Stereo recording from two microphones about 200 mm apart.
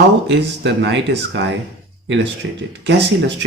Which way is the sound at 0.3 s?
65° right (ahead or behind).